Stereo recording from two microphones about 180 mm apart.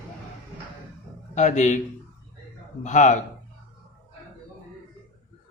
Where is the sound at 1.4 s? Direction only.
40° left (ahead or behind).